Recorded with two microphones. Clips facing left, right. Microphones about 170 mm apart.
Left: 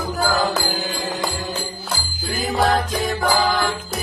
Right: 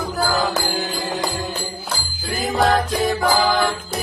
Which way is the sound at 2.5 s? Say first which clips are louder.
Right 1 dB; centre (ahead or behind).